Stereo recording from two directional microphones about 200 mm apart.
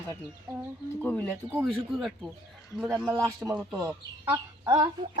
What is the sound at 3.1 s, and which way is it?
Speech, 15° right (ahead or behind).